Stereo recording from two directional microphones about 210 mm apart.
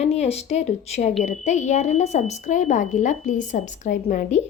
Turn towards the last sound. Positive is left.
turn(degrees=35)  # may be behind; listen again after turning